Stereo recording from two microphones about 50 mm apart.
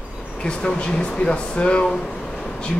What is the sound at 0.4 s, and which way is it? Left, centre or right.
Speech, centre.